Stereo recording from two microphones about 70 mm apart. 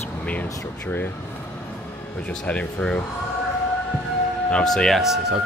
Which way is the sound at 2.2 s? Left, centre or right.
Centre.